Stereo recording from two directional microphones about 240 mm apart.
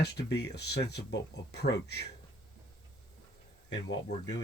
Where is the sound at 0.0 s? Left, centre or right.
Left.